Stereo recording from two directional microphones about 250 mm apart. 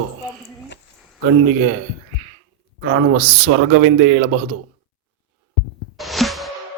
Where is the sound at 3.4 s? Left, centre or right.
Right.